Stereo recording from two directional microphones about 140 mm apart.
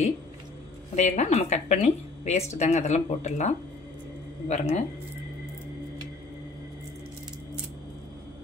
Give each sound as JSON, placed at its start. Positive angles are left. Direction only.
{"t": 0.9, "sound": "a woman's voice", "side_deg": 50}